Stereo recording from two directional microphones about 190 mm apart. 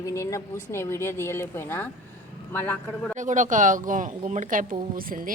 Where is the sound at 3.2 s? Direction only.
40° right (ahead or behind).